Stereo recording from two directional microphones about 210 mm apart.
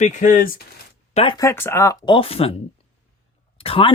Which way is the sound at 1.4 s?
10° left (ahead or behind).